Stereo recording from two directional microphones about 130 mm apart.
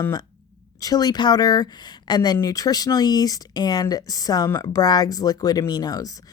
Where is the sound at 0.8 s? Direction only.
30° left (ahead or behind).